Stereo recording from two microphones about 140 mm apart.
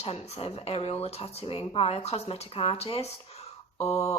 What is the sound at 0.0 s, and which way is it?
Speech, 45° left (ahead or behind).